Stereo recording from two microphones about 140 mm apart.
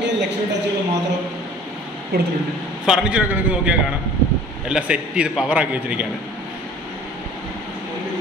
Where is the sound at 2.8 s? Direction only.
5° right (ahead or behind).